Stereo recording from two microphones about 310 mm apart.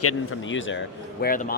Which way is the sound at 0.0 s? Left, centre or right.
Left.